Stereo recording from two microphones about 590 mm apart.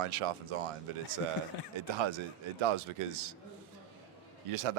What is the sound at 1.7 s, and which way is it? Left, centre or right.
A man's voice, right.